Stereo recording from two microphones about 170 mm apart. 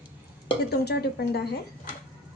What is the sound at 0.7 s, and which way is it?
Speech, 70° left (ahead or behind).